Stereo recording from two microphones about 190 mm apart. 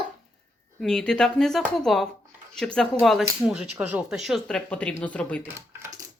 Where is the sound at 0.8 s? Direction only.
5° left (ahead or behind).